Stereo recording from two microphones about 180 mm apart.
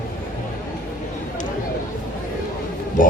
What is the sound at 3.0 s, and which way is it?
Speech, 45° left (ahead or behind).